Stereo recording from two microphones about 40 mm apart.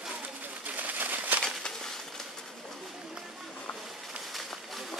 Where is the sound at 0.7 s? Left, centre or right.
Right.